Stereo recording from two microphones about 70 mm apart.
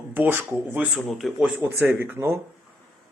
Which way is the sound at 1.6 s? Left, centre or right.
Right.